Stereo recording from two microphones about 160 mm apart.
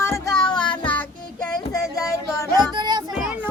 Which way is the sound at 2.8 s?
25° right (ahead or behind).